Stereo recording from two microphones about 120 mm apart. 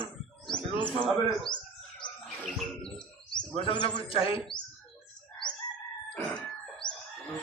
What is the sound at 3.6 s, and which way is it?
Speech, 40° left (ahead or behind).